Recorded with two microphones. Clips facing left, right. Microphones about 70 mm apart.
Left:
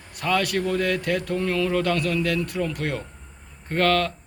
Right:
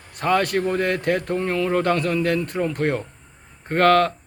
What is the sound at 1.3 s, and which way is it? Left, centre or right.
Speech, right.